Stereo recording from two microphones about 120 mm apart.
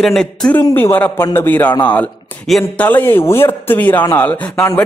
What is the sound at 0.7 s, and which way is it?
A man's voice, 20° left (ahead or behind).